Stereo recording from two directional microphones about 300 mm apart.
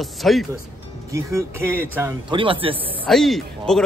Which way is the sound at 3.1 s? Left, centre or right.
Centre.